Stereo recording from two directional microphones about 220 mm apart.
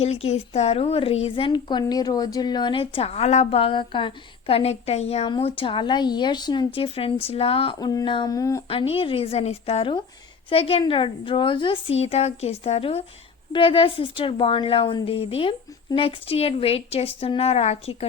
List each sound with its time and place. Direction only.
0.0 s a woman's voice: 30° left (ahead or behind)
8.6 s a woman's voice: 25° left (ahead or behind)